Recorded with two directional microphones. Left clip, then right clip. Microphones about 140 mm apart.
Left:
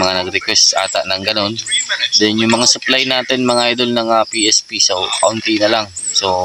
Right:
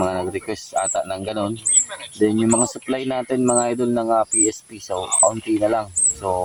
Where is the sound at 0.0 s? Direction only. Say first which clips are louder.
Left 7 dB; 30° left (ahead or behind).